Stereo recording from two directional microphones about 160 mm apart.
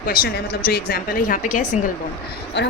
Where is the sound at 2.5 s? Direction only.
90° left.